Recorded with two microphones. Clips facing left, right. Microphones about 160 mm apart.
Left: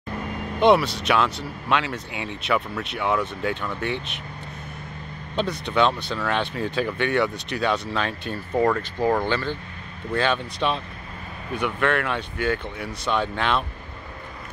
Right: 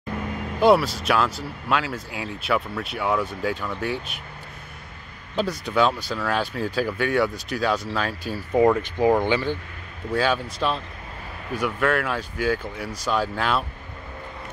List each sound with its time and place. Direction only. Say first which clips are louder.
0.6 s speech: even; 5° right (ahead or behind)
5.3 s speech: right 1 dB; 5° right (ahead or behind)